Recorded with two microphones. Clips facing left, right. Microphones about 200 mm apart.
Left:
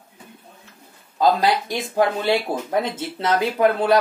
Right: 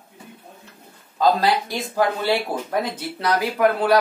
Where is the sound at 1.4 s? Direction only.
20° left (ahead or behind).